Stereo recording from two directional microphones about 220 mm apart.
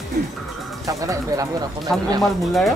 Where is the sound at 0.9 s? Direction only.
15° right (ahead or behind).